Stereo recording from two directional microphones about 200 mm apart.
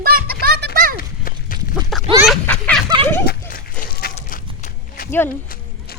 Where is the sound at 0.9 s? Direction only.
45° left (ahead or behind).